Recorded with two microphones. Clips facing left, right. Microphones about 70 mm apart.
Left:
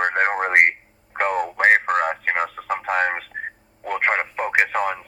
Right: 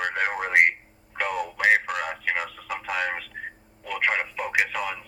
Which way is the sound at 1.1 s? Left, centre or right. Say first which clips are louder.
Left 6 dB; left.